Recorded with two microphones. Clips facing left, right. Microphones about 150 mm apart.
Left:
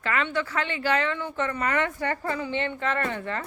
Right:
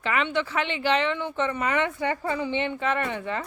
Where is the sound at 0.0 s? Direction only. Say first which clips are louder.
Right 1 dB; 15° right (ahead or behind).